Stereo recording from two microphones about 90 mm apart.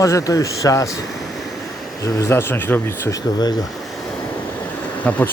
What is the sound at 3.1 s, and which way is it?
Speech, 50° left (ahead or behind).